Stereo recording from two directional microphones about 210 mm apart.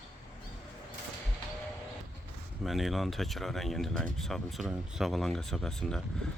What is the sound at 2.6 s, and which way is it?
Speech, centre (ahead or behind).